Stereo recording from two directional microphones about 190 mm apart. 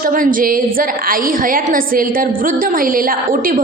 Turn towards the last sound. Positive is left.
turn(degrees=-45)  # may be behind; listen again after turning